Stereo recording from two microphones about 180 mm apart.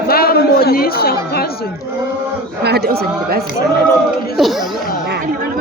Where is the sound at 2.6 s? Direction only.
60° right (ahead or behind).